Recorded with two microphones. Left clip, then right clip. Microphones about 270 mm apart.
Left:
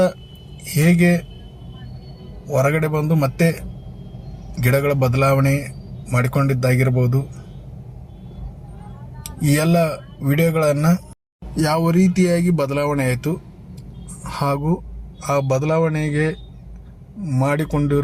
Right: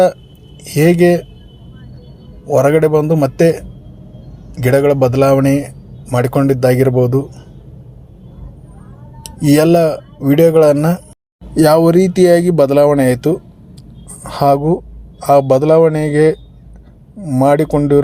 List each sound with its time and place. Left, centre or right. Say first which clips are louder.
0.6 s speech: right 8 dB; right
2.5 s speech: right 9 dB; right
4.6 s speech: right 8 dB; right
9.5 s speech: right 9 dB; right